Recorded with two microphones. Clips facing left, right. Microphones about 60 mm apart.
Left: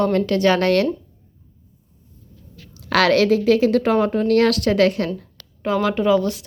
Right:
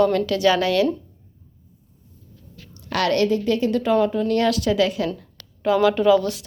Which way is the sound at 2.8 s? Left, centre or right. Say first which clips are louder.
Left 4 dB; left.